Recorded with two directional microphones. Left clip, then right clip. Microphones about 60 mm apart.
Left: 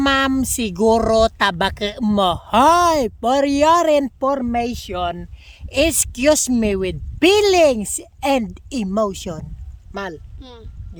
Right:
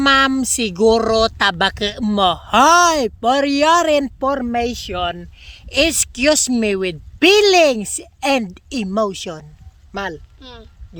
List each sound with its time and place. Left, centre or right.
0.0 s speech: left
1.4 s speech: left